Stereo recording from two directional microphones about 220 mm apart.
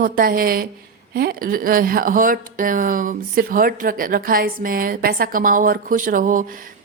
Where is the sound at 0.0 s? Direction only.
40° right (ahead or behind).